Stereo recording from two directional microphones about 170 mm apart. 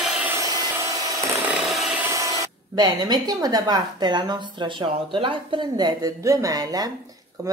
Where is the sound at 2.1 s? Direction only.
20° right (ahead or behind).